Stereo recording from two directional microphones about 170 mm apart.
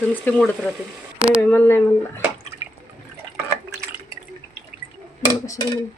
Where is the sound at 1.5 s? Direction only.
10° left (ahead or behind).